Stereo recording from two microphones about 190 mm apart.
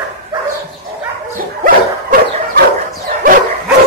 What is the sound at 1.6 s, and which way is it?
Dog, 50° right (ahead or behind).